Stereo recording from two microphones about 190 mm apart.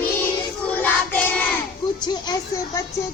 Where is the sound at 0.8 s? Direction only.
10° left (ahead or behind).